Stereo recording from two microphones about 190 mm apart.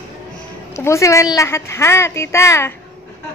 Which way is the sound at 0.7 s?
15° left (ahead or behind).